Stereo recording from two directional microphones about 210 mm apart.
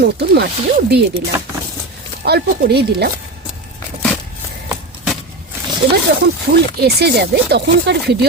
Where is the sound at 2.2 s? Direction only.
50° right (ahead or behind).